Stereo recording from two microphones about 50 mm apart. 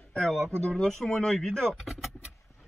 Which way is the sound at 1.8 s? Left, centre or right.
Centre.